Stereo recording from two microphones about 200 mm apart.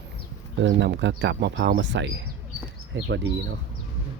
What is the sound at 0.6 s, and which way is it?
Speech, 60° right (ahead or behind).